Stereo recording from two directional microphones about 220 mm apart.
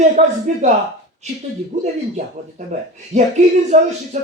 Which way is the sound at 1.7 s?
30° right (ahead or behind).